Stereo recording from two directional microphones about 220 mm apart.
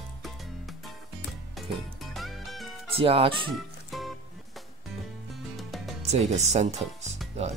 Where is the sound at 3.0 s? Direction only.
25° right (ahead or behind).